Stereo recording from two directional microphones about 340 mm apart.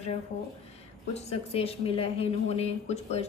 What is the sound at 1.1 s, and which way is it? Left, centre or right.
Speech, centre.